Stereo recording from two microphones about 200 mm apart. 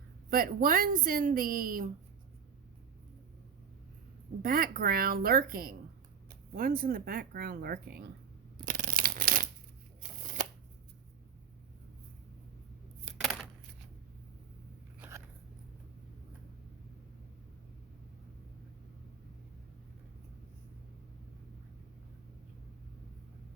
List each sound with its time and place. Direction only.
0.3 s a woman's voice: 45° right (ahead or behind)
4.4 s a woman's voice: 45° right (ahead or behind)
8.5 s a sound: 45° right (ahead or behind)
10.0 s shuffling cards: 40° right (ahead or behind)